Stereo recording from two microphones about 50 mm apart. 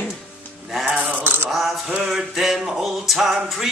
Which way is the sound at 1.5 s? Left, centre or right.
Centre.